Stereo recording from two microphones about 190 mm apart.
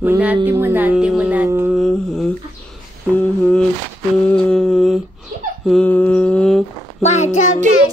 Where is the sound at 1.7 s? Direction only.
Centre (ahead or behind).